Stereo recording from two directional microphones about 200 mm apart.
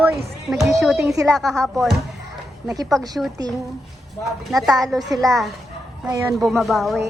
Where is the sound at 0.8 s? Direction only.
5° right (ahead or behind).